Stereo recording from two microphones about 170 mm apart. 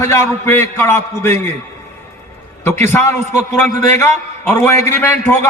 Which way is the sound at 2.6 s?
15° left (ahead or behind).